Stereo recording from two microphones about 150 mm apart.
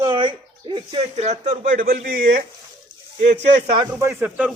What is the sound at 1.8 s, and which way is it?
Speech, 75° right (ahead or behind).